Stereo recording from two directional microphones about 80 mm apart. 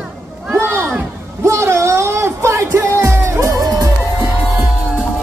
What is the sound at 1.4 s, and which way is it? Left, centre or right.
Music, right.